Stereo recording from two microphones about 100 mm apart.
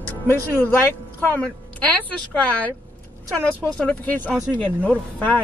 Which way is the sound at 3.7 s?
15° left (ahead or behind).